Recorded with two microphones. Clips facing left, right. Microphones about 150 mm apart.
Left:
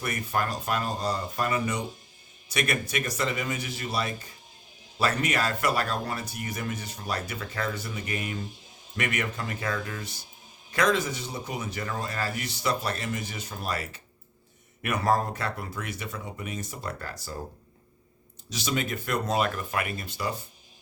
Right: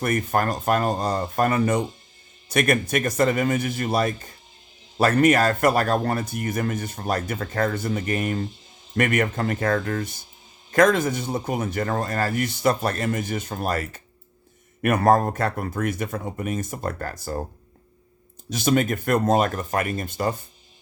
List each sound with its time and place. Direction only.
0.0 s speech: 50° right (ahead or behind)
18.4 s speech: 50° right (ahead or behind)